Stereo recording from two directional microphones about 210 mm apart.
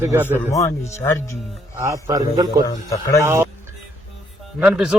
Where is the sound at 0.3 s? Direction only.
15° left (ahead or behind).